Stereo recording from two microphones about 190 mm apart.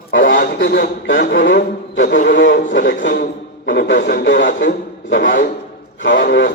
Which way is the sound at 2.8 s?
45° left (ahead or behind).